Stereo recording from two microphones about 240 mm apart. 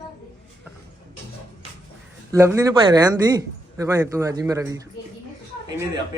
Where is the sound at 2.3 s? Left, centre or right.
Centre.